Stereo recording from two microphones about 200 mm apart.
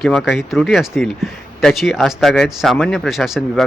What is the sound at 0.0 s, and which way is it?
Speech, centre (ahead or behind).